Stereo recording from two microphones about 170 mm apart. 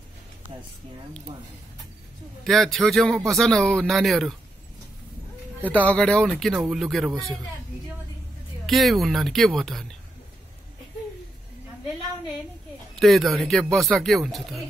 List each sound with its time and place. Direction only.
2.4 s speech: centre (ahead or behind)
5.6 s speech: 10° left (ahead or behind)
8.6 s speech: centre (ahead or behind)
13.0 s speech: centre (ahead or behind)